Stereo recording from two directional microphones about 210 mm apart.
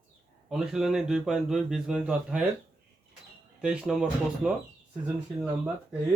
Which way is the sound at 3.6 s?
5° right (ahead or behind).